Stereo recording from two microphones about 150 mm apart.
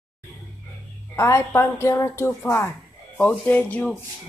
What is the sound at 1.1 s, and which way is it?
A woman's voice, 15° left (ahead or behind).